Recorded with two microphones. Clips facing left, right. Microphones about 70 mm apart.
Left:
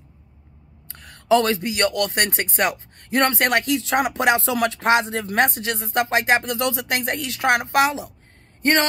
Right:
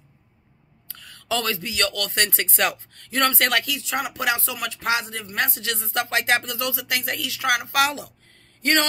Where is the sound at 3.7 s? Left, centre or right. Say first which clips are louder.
Left 7 dB; left.